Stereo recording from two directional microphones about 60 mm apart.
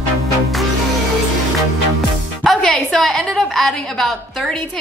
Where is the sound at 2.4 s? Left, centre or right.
Centre.